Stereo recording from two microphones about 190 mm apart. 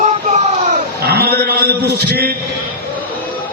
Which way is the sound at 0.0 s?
35° right (ahead or behind).